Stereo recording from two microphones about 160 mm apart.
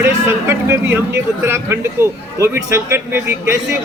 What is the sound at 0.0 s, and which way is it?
A man's voice, 15° right (ahead or behind).